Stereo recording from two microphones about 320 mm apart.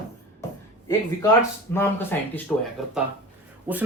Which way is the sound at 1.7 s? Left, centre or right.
Centre.